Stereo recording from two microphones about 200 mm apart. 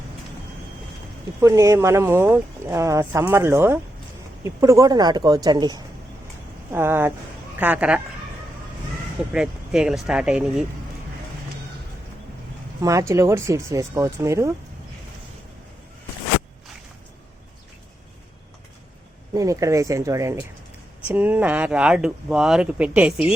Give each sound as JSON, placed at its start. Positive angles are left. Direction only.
{"t": 1.4, "sound": "speech", "side_deg": -15}
{"t": 9.3, "sound": "speech", "side_deg": -5}
{"t": 12.8, "sound": "speech", "side_deg": -15}
{"t": 19.3, "sound": "speech", "side_deg": -15}